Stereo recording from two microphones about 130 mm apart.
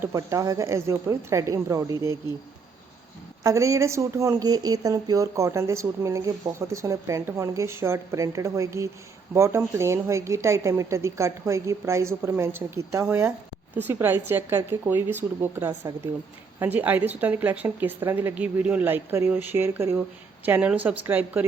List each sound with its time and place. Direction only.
0.0 s speech: 25° right (ahead or behind)
3.4 s a woman's voice: 25° right (ahead or behind)